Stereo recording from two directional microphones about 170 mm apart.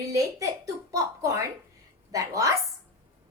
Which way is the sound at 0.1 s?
20° right (ahead or behind).